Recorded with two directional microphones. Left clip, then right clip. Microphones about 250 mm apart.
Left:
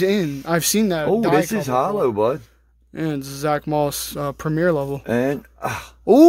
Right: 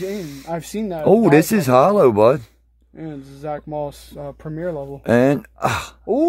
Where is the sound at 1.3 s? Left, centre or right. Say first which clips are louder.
Right 5 dB; right.